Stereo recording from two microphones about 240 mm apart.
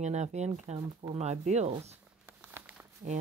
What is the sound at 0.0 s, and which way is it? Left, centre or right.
Speech, right.